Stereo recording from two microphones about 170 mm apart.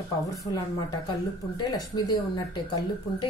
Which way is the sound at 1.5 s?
25° left (ahead or behind).